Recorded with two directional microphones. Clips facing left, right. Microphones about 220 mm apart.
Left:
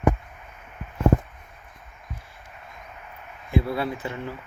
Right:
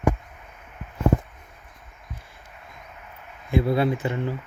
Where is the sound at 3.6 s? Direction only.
20° right (ahead or behind).